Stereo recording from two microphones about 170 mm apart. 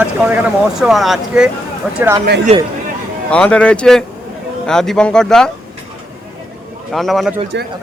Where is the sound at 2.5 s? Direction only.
40° right (ahead or behind).